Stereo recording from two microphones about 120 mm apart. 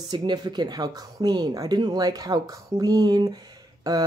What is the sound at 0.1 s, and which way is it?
Speech, 35° right (ahead or behind).